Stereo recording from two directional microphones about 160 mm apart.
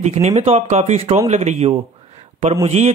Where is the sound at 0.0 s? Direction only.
45° right (ahead or behind).